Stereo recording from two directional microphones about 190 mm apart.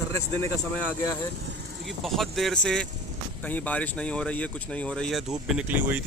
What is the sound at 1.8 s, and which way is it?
Speech, centre (ahead or behind).